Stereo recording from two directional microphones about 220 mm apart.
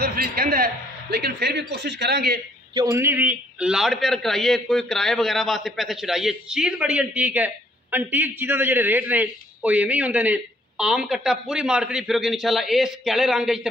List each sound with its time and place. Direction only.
0.0 s a man's voice: 45° right (ahead or behind)
2.7 s a man's voice: 15° right (ahead or behind)